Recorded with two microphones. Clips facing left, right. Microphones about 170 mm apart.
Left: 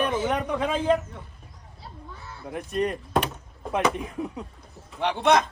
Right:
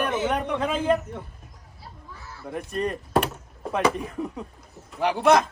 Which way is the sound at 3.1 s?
5° right (ahead or behind).